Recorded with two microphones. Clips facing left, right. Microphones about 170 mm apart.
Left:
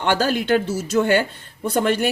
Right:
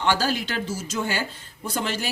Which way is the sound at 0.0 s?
55° left (ahead or behind).